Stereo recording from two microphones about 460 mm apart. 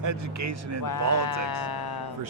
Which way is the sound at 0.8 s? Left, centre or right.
Left.